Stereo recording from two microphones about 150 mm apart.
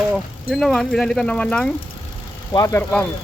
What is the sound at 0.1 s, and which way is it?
Speech, centre (ahead or behind).